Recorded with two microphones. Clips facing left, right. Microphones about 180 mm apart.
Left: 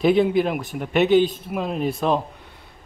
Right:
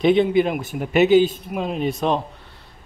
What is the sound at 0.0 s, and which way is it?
A man's voice, centre (ahead or behind).